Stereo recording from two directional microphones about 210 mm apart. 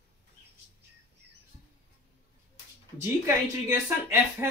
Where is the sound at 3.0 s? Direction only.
10° right (ahead or behind).